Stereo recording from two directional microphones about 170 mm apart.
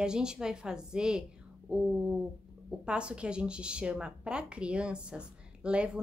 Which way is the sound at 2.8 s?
5° right (ahead or behind).